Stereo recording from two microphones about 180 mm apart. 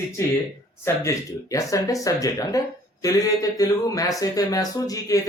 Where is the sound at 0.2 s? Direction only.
15° left (ahead or behind).